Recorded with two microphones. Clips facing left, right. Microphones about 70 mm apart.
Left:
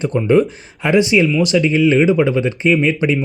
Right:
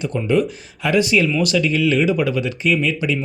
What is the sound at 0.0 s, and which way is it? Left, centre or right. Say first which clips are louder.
A man's voice: left 5 dB; left.